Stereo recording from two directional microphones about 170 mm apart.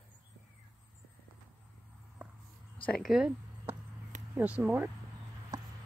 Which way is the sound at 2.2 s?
10° right (ahead or behind).